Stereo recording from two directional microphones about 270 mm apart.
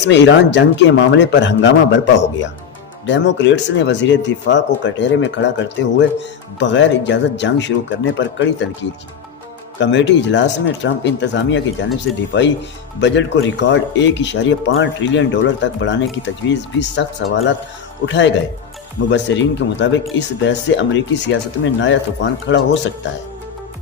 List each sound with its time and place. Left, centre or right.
0.0 s speech: left
3.1 s speech: left
9.8 s speech: left